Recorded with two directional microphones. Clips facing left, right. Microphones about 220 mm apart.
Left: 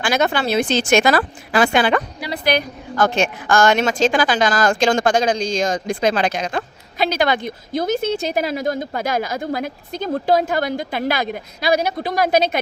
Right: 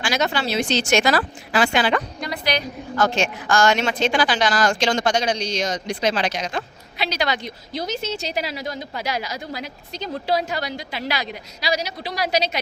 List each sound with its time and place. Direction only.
0.0 s speech: 55° left (ahead or behind)